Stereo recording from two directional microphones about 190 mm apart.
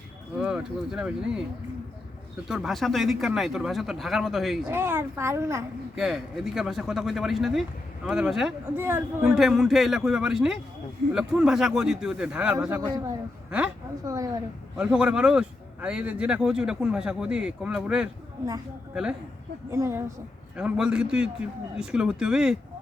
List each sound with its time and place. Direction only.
0.3 s speech: 5° right (ahead or behind)
2.5 s speech: centre (ahead or behind)
4.7 s a child's voice: 10° right (ahead or behind)
6.0 s speech: centre (ahead or behind)
12.5 s a child's voice: 15° right (ahead or behind)
14.8 s speech: 5° right (ahead or behind)
19.7 s a child's voice: 15° right (ahead or behind)